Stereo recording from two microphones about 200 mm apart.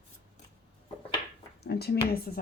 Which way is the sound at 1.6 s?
50° left (ahead or behind).